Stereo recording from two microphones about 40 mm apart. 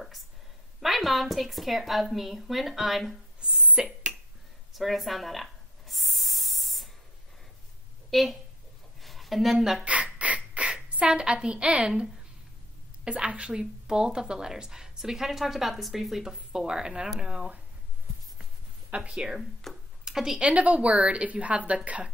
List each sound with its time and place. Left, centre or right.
0.7 s a woman's voice: centre
3.8 s a woman's voice: centre
4.7 s spray: centre
8.1 s a woman's voice: centre
9.0 s a sound: centre
9.6 s a woman's voice: centre
9.8 s a sound: right
10.7 s a woman's voice: right
13.0 s a woman's voice: right
18.9 s speech: right
19.1 s a woman's voice: centre
19.7 s a sound: centre
20.3 s a woman's voice: right